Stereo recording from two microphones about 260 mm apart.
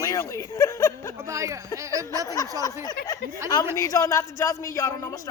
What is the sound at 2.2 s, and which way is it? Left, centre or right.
Speech, centre.